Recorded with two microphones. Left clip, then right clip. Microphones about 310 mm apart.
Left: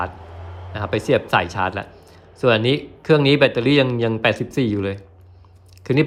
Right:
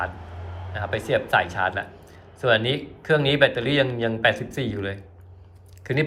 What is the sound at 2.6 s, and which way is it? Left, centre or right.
Speech, centre.